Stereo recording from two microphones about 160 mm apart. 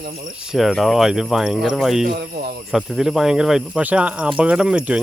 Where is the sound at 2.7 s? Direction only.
Centre (ahead or behind).